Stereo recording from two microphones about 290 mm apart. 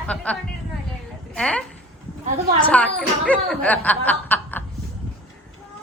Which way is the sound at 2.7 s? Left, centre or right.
Centre.